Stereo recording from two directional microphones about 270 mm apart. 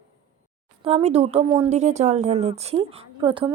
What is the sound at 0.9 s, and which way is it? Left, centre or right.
A woman's voice, right.